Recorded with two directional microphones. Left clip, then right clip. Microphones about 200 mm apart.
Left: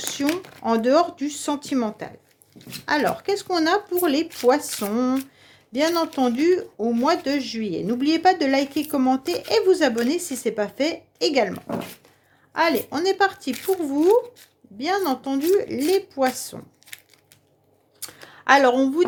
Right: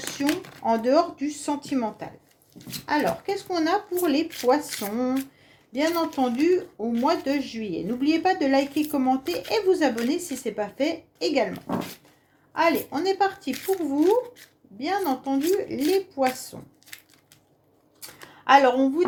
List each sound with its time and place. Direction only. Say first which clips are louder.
0.3 s speech: even; 10° left (ahead or behind)
0.6 s speech: left 2 dB; 40° left (ahead or behind)
12.5 s a woman's voice: left 2 dB; 40° left (ahead or behind)
18.0 s a sound: left 3 dB; 40° left (ahead or behind)